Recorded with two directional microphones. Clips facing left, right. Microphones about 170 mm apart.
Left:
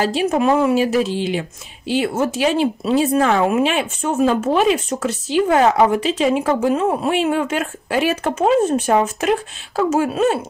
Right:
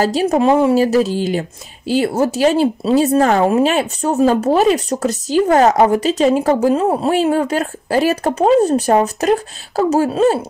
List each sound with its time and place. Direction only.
0.0 s speech: 40° right (ahead or behind)
0.5 s speech: 20° right (ahead or behind)
0.7 s speech: 40° right (ahead or behind)